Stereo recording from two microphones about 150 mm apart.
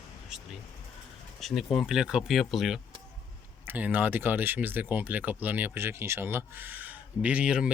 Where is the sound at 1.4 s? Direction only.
Centre (ahead or behind).